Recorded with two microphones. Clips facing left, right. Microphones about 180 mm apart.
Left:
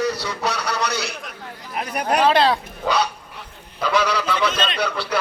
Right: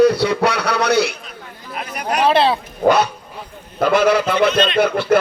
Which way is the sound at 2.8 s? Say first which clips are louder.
Right 10 dB; 50° right (ahead or behind).